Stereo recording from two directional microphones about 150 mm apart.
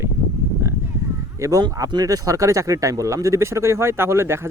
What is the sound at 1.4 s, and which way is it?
Speech, 25° right (ahead or behind).